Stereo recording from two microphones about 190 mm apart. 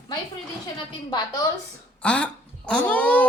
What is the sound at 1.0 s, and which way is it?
Speech, 20° left (ahead or behind).